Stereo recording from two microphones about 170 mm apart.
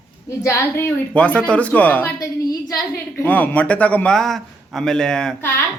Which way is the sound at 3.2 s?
10° left (ahead or behind).